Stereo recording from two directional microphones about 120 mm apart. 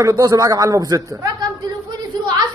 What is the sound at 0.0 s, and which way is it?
A man's voice, 25° right (ahead or behind).